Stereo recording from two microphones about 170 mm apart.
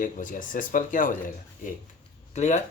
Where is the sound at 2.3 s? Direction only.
40° left (ahead or behind).